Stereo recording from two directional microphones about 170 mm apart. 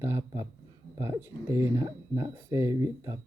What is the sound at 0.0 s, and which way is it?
Speech, 15° right (ahead or behind).